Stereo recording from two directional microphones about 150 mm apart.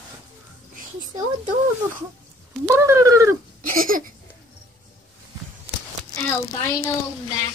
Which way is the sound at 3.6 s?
65° right (ahead or behind).